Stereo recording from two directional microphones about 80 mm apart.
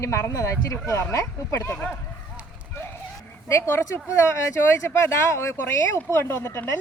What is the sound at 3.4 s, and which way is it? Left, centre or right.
A woman's voice, left.